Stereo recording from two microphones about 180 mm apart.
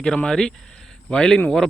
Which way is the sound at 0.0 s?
5° left (ahead or behind).